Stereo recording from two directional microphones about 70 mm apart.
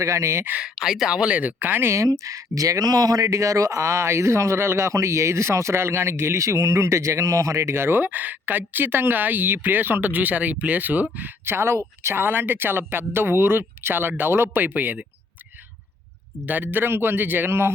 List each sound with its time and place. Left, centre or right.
0.0 s speech: right
0.6 s speech: centre; by 1.9 s right
1.9 s speech: right
16.5 s speech: right